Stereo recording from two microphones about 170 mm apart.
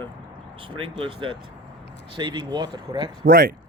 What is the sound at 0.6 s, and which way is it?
Speech, 30° right (ahead or behind).